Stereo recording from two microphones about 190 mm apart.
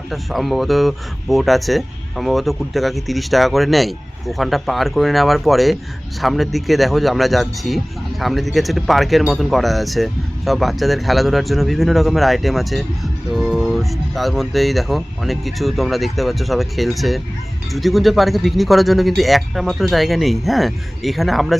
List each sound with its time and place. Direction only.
0.1 s speech: centre (ahead or behind)